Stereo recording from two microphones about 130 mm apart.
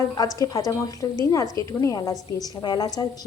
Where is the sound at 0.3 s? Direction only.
25° left (ahead or behind).